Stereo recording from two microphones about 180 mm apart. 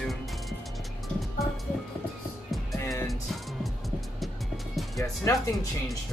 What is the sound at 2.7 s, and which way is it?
Music, 20° left (ahead or behind).